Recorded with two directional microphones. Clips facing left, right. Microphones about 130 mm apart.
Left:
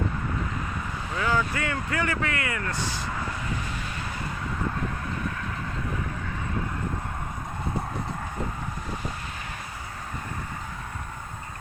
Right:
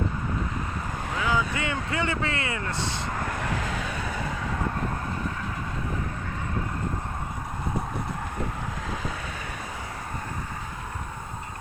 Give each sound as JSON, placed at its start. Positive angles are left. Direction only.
{"t": 1.2, "sound": "speech", "side_deg": -15}